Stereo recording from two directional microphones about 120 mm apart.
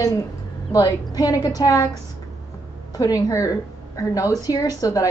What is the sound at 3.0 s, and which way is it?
A woman's voice, 30° left (ahead or behind).